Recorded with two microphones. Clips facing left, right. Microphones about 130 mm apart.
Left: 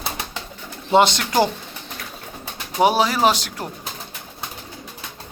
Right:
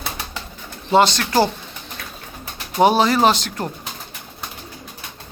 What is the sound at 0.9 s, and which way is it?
Speech, 20° left (ahead or behind).